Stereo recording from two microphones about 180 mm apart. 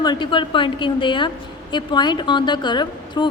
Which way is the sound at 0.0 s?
25° left (ahead or behind).